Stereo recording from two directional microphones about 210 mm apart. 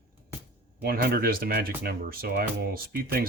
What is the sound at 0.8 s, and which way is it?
Speech, 45° right (ahead or behind).